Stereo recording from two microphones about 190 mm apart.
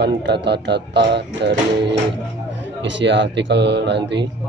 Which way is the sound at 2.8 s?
70° right (ahead or behind).